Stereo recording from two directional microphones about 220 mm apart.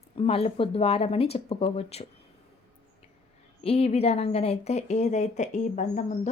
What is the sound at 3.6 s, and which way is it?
A woman's voice, 25° left (ahead or behind).